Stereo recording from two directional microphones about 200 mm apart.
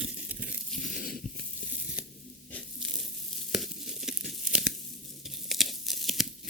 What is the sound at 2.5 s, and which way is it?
Crushing, centre (ahead or behind).